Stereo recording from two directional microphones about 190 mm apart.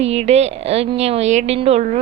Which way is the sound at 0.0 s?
35° right (ahead or behind).